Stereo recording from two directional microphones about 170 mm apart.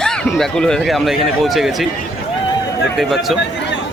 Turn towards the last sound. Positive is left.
turn(degrees=0)  # may be behind; listen again after turning